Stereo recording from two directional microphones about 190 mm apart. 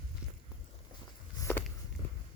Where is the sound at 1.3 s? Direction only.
15° left (ahead or behind).